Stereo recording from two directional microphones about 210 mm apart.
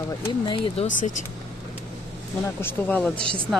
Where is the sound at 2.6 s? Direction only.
10° left (ahead or behind).